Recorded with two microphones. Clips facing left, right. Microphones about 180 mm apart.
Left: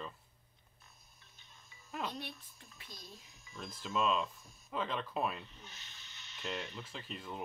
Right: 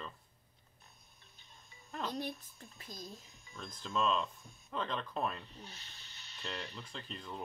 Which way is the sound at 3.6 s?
5° left (ahead or behind).